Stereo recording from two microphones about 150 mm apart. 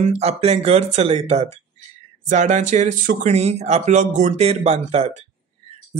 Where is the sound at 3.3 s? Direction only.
45° right (ahead or behind).